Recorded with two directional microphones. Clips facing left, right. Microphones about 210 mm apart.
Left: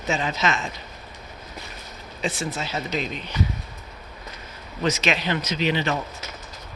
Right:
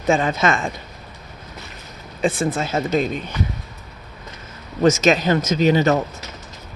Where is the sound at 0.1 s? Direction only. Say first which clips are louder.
Right 7 dB; 50° right (ahead or behind).